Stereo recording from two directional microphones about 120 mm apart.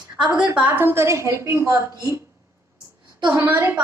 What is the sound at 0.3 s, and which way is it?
A woman's voice, 10° right (ahead or behind).